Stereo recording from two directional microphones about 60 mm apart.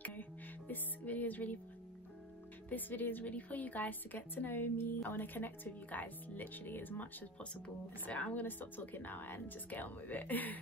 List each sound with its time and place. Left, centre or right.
0.0 s music: left
2.7 s a woman's voice: left